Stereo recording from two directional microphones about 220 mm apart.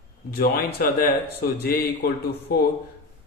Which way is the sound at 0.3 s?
45° left (ahead or behind).